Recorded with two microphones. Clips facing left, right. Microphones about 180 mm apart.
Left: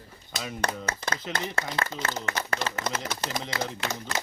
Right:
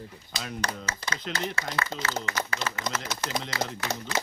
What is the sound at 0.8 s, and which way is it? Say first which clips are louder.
Speech: left 3 dB; 50° left (ahead or behind).